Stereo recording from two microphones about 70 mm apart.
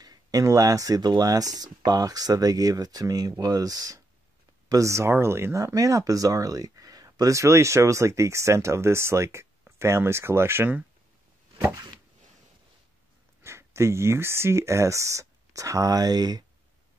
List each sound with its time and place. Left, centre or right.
0.0 s speech: right
5.6 s speech: right
11.7 s a sound: right
13.4 s speech: right